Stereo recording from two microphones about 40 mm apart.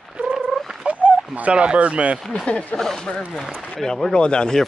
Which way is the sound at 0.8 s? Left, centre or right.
Right.